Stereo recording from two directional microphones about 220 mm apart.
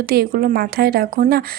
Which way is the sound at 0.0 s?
45° right (ahead or behind).